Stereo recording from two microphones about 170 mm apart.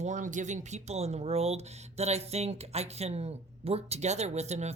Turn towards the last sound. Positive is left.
turn(degrees=-40)  # may be behind; listen again after turning